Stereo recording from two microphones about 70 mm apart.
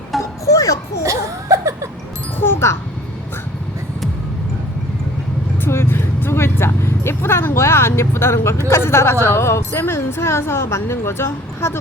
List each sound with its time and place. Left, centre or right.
0.2 s a sound: left
1.0 s laughter: right
2.4 s music: left
5.6 s vehicle: left
8.7 s speech: left